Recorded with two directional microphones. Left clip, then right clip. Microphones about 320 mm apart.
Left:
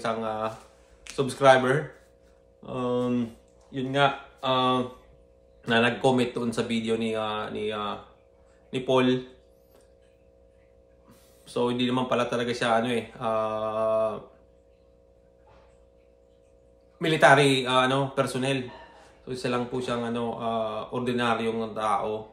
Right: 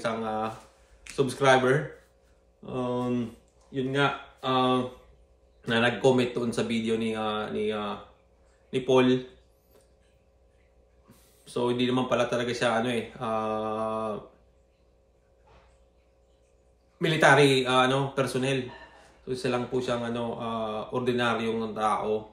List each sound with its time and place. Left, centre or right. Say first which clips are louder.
0.0 s speech: left 1 dB; centre
11.4 s speech: left 1 dB; centre
17.0 s speech: left 1 dB; centre